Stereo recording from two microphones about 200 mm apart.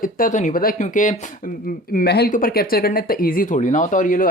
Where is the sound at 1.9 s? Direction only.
55° left (ahead or behind).